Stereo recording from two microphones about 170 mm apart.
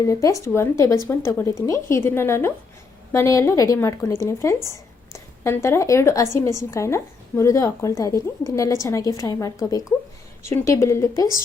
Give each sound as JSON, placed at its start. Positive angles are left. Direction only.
{"t": 0.0, "sound": "a woman's voice", "side_deg": 20}